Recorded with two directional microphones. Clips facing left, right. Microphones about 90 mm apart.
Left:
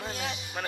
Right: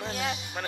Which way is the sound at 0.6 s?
Centre (ahead or behind).